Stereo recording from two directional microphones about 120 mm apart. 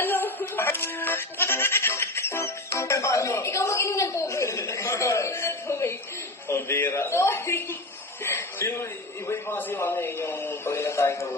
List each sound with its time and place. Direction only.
0.0 s music: 15° left (ahead or behind)
6.5 s a man's voice: 20° left (ahead or behind)
8.2 s a sound: 20° left (ahead or behind)
9.3 s a man's voice: 20° left (ahead or behind)